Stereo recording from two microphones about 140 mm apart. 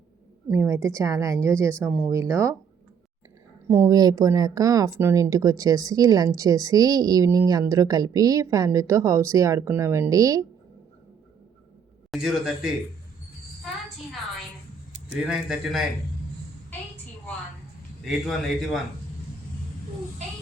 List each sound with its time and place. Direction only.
0.5 s speech: 20° right (ahead or behind)
3.7 s speech: 20° right (ahead or behind)
12.1 s a man's voice: 5° right (ahead or behind)
15.3 s a man's voice: 5° right (ahead or behind)
18.0 s a man's voice: centre (ahead or behind)